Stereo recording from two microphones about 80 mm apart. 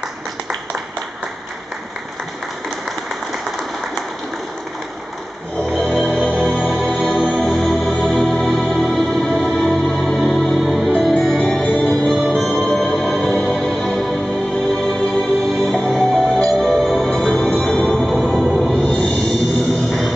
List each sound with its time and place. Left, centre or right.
5.6 s music: centre
7.2 s music: centre
7.9 s music: centre
11.6 s music: centre
12.3 s music: centre
19.9 s music: centre